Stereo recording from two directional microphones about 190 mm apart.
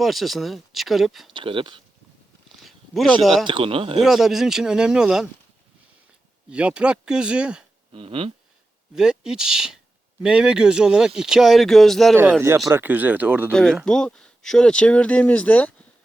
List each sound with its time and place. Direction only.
0.0 s speech: centre (ahead or behind)
1.3 s speech: 25° right (ahead or behind)
2.6 s a sound: centre (ahead or behind)
3.4 s speech: 25° right (ahead or behind)
4.0 s speech: centre (ahead or behind)
6.5 s speech: 5° right (ahead or behind)
7.9 s speech: 30° right (ahead or behind)
9.0 s speech: 5° right (ahead or behind)
12.1 s speech: 10° right (ahead or behind)
13.5 s speech: 5° left (ahead or behind)